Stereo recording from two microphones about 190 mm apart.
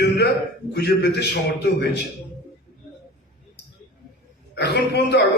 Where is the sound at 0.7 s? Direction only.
60° left (ahead or behind).